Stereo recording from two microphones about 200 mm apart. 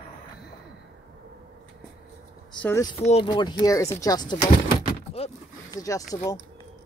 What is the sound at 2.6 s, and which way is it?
Speech, 15° left (ahead or behind).